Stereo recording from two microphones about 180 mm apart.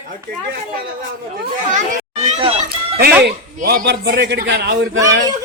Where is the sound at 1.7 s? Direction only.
40° right (ahead or behind).